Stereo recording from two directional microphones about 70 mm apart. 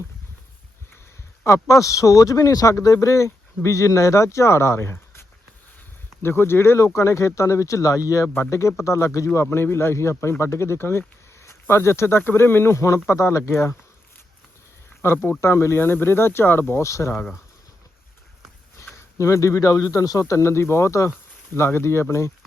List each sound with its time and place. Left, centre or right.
1.5 s speech: left
6.2 s speech: left
8.3 s speech: left
15.0 s speech: left
16.8 s speech: left
18.8 s a sound: left
19.2 s speech: left